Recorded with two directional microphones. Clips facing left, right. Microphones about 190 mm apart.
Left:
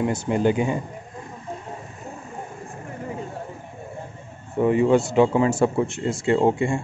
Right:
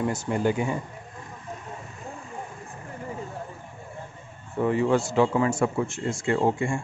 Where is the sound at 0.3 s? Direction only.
20° left (ahead or behind).